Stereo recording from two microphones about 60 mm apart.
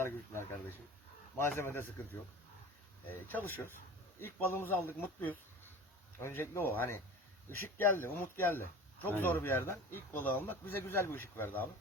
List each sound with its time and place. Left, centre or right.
1.4 s speech: left
3.1 s a man's voice: left